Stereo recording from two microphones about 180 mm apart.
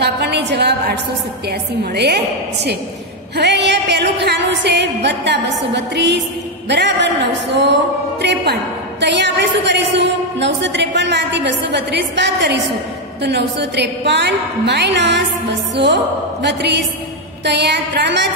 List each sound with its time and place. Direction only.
0.0 s a sound: 70° right (ahead or behind)
1.5 s a woman's voice: 65° right (ahead or behind)
8.2 s a woman's voice: 70° right (ahead or behind)